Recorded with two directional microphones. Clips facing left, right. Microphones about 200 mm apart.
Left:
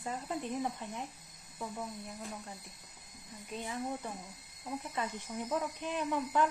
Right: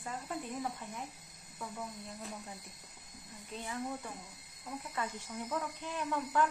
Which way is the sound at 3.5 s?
15° left (ahead or behind).